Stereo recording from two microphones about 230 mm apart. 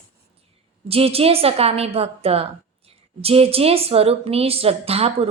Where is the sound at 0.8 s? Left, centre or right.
Right.